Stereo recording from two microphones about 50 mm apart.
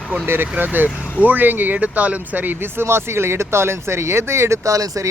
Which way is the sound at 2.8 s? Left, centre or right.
Right.